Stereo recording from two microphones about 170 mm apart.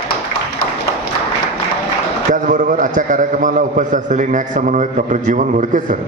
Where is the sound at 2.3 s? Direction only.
50° right (ahead or behind).